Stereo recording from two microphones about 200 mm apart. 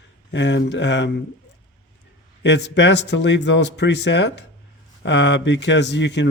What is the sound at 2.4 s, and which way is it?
Speech, 60° left (ahead or behind).